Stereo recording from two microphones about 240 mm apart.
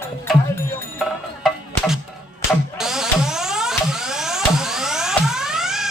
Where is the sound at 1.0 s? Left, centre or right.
Centre.